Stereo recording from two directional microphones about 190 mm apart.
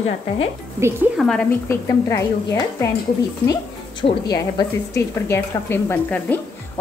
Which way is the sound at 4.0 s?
20° left (ahead or behind).